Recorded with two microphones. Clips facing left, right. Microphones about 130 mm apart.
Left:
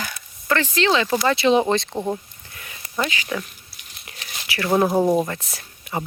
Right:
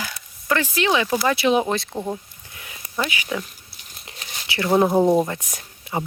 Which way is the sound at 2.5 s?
15° right (ahead or behind).